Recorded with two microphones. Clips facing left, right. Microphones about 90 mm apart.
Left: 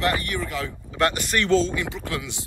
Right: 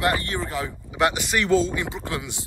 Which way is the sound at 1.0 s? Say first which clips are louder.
Right 1 dB; 5° right (ahead or behind).